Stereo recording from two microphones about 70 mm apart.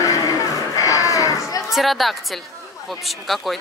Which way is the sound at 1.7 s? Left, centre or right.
Centre.